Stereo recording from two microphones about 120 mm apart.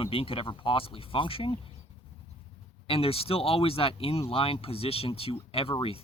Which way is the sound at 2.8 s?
50° left (ahead or behind).